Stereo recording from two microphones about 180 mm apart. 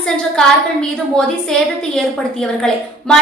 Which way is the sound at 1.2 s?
5° left (ahead or behind).